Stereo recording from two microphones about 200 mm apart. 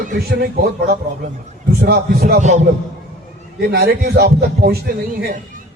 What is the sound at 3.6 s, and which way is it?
A man's voice, 55° right (ahead or behind).